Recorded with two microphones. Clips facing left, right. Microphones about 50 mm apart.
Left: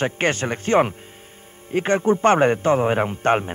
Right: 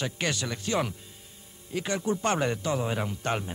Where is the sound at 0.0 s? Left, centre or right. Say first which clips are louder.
Left 9 dB; left.